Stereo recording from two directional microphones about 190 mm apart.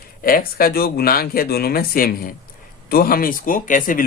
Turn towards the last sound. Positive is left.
turn(degrees=45)  # may be behind; listen again after turning